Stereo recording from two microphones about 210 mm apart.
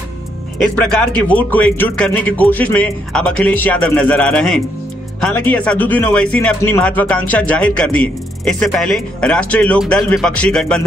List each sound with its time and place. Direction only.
0.6 s speech: 5° left (ahead or behind)